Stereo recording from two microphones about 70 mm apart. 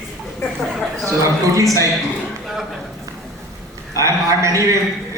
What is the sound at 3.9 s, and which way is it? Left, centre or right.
Speech, right.